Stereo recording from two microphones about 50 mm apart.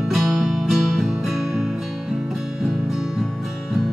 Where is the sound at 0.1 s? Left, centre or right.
Centre.